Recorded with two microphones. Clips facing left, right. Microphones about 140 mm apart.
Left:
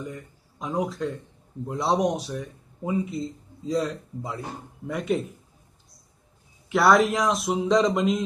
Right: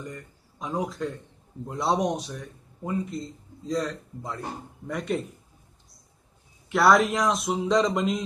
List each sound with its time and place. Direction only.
0.0 s speech: centre (ahead or behind)
6.7 s speech: centre (ahead or behind)